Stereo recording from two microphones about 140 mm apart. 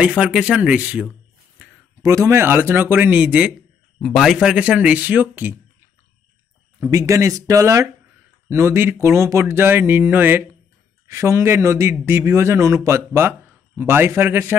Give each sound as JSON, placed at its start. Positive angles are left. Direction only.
{"t": 0.0, "sound": "speech", "side_deg": -5}
{"t": 2.0, "sound": "speech", "side_deg": -20}
{"t": 6.8, "sound": "speech", "side_deg": -20}